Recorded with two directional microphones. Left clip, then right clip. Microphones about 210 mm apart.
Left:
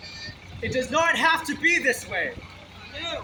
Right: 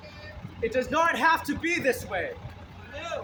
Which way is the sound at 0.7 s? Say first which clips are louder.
Left 3 dB; centre (ahead or behind).